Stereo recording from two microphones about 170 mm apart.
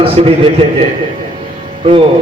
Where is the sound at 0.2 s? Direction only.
35° right (ahead or behind).